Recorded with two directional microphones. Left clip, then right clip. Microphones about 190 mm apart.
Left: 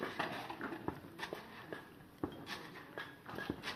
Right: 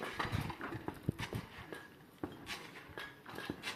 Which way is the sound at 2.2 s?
20° right (ahead or behind).